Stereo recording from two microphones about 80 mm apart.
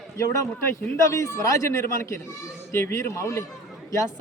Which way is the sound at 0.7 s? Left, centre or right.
Left.